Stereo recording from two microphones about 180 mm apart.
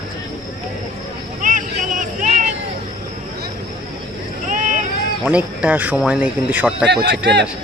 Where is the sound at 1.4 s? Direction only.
45° right (ahead or behind).